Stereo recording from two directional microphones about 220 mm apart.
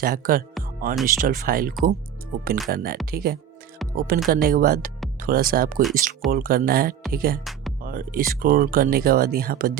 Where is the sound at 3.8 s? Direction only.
Centre (ahead or behind).